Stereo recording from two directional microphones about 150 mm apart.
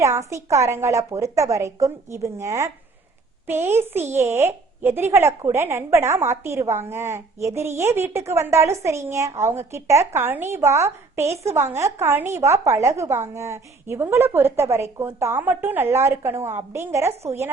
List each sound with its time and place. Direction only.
0.0 s a woman's voice: 20° right (ahead or behind)